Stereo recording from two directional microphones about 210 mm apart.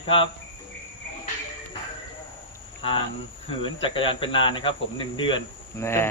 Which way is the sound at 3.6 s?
25° left (ahead or behind).